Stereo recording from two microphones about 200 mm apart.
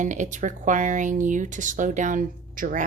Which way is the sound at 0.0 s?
40° right (ahead or behind).